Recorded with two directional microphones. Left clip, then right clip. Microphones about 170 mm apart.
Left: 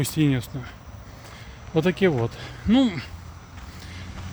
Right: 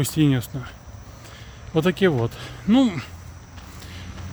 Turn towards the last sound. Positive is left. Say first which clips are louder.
# right 2 dB
turn(degrees=-15)  # may be behind; listen again after turning